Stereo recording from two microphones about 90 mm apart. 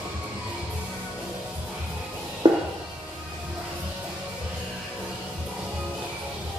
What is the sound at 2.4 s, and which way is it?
Music, 60° right (ahead or behind).